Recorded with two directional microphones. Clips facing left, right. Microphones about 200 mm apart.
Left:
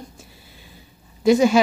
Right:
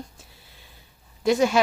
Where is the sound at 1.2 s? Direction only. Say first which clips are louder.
Left 5 dB; 5° left (ahead or behind).